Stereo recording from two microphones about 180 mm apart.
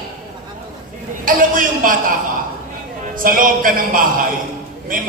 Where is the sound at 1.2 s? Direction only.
50° right (ahead or behind).